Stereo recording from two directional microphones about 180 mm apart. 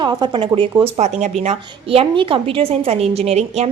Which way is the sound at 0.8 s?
40° right (ahead or behind).